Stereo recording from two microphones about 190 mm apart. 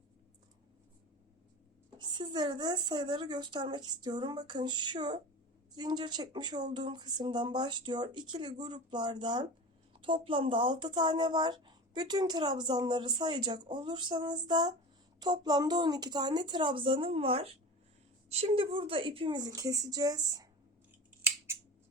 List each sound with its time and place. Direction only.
2.0 s speech: 25° right (ahead or behind)